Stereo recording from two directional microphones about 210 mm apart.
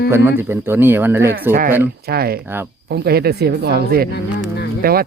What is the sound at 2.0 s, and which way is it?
Speech, 45° right (ahead or behind).